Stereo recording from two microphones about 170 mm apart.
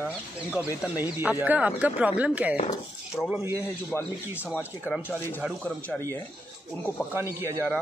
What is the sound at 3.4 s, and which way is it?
Speech, 15° right (ahead or behind).